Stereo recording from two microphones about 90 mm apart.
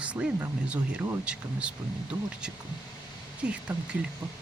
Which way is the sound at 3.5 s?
10° right (ahead or behind).